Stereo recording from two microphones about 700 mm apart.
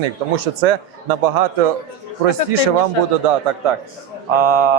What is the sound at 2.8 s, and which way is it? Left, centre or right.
A man's voice, right.